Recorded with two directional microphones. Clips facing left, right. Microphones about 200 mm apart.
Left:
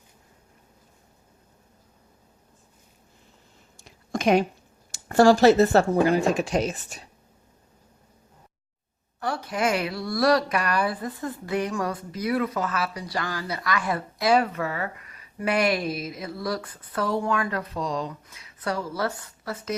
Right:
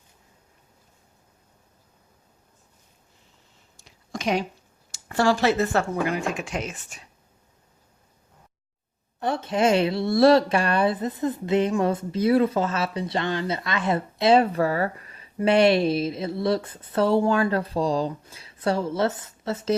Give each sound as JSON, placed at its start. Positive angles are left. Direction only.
{"t": 3.8, "sound": "a sound", "side_deg": 50}
{"t": 4.9, "sound": "speech", "side_deg": 45}
{"t": 9.2, "sound": "speech", "side_deg": -25}